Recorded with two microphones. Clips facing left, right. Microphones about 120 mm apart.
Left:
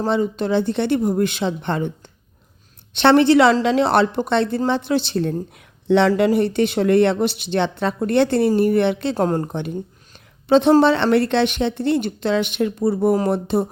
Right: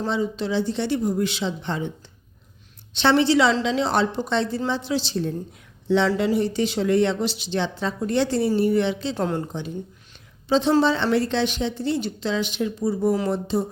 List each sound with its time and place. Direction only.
0.1 s a woman's voice: 55° left (ahead or behind)
9.1 s a woman's voice: 45° left (ahead or behind)
9.5 s a woman's voice: 60° left (ahead or behind)